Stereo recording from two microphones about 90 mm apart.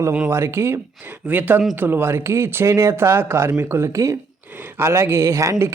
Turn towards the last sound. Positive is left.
turn(degrees=-35)  # may be behind; listen again after turning